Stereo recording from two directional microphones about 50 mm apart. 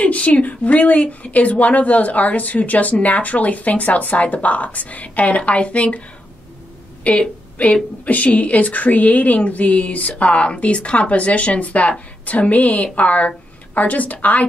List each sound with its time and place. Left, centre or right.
0.0 s a woman's voice: left